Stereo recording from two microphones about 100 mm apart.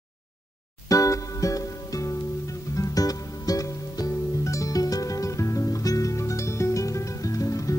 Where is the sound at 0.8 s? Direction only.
35° left (ahead or behind).